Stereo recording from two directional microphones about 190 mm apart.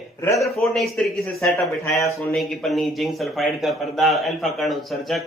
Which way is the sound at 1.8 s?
15° left (ahead or behind).